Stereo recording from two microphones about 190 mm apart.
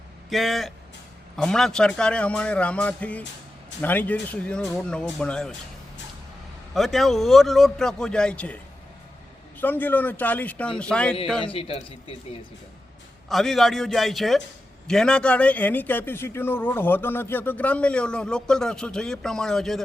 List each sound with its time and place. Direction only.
0.3 s a man's voice: centre (ahead or behind)
6.7 s a man's voice: centre (ahead or behind)
9.6 s a man's voice: 10° left (ahead or behind)
11.4 s speech: 30° left (ahead or behind)
13.2 s a man's voice: centre (ahead or behind)